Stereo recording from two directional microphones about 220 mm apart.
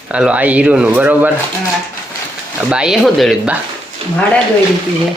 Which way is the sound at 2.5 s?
5° right (ahead or behind).